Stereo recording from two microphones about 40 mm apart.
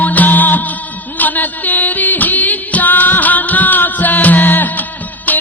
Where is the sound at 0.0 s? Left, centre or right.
Left.